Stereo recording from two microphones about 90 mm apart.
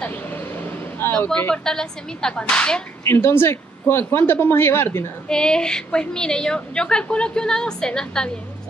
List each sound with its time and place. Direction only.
0.0 s vehicle: 20° left (ahead or behind)
1.2 s a woman's voice: 25° left (ahead or behind)
1.5 s a woman's voice: 5° left (ahead or behind)
3.0 s a woman's voice: 30° left (ahead or behind)
5.3 s a woman's voice: 10° left (ahead or behind)